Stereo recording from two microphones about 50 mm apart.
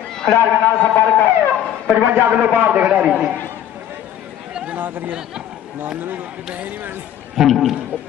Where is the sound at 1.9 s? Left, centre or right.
Right.